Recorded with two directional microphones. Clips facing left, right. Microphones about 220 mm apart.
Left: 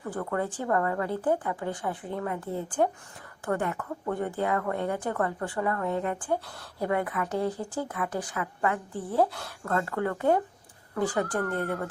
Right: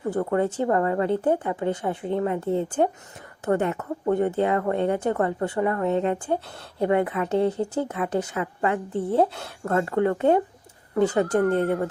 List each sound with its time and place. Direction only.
0.0 s a woman's voice: 25° right (ahead or behind)